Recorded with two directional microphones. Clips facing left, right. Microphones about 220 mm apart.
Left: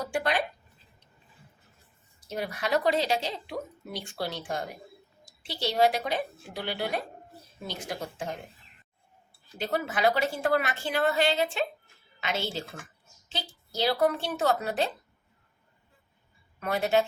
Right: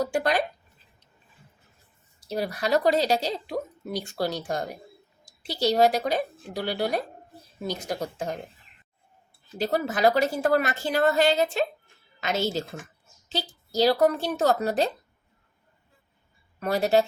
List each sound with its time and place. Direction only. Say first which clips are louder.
0.0 s speech: right 4 dB; 40° right (ahead or behind)
2.2 s a woman's voice: right 4 dB; 35° right (ahead or behind)
9.6 s a woman's voice: right 4 dB; 40° right (ahead or behind)
16.6 s a woman's voice: right 4 dB; 35° right (ahead or behind)